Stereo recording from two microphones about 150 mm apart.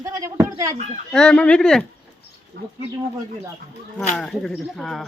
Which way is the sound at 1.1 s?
5° left (ahead or behind).